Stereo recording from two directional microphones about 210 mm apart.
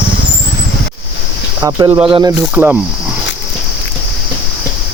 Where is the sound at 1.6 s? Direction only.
15° right (ahead or behind).